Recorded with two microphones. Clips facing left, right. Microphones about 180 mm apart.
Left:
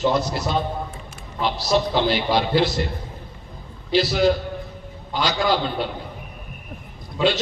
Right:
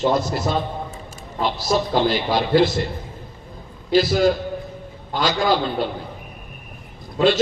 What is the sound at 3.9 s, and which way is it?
Speech, 45° right (ahead or behind).